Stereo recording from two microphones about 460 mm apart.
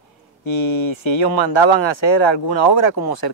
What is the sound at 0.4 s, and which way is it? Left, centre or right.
A man's voice, left.